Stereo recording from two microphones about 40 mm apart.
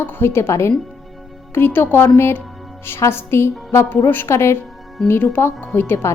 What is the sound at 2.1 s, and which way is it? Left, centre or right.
A woman's voice, left.